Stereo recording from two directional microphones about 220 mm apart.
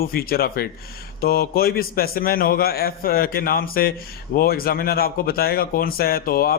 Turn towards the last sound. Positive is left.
turn(degrees=40)  # may be behind; listen again after turning